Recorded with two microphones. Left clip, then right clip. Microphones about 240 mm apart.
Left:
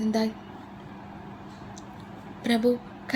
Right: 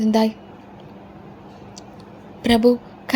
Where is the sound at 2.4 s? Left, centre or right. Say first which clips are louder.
Right 8 dB; right.